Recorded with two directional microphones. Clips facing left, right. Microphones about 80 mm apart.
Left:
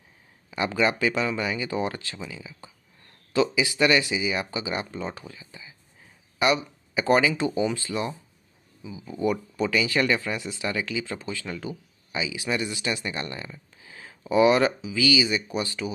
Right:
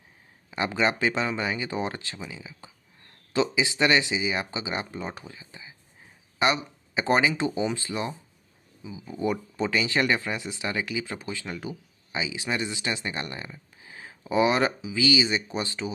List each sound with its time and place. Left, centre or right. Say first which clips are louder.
0.5 s speech: left 1 dB; right